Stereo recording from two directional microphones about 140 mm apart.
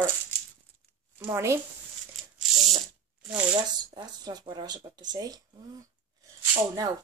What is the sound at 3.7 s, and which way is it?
Speech, 30° right (ahead or behind).